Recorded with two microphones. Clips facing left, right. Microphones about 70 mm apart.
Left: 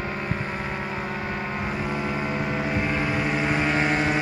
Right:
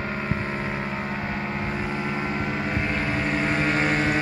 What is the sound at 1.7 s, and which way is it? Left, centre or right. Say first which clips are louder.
Vehicle: even; centre.